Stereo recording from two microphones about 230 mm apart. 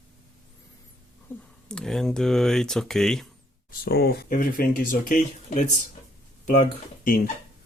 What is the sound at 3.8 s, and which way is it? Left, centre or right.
Speech, left.